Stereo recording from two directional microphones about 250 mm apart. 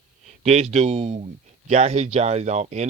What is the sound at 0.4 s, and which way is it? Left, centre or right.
Speech, right.